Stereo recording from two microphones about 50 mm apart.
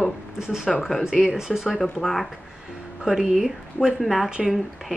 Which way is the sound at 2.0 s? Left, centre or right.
Centre.